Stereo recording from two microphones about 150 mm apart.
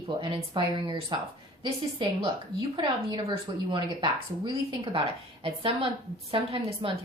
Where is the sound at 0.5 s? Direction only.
35° right (ahead or behind).